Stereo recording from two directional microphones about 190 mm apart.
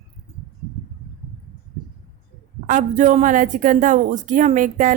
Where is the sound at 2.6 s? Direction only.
40° right (ahead or behind).